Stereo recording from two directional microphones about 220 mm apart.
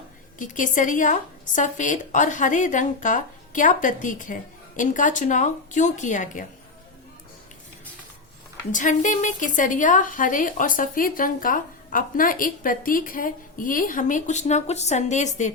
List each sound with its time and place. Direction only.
0.3 s a woman's voice: 35° left (ahead or behind)
8.7 s a woman's voice: 35° left (ahead or behind)